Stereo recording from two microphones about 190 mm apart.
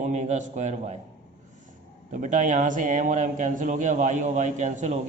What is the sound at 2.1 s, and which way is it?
Mantra, 40° right (ahead or behind).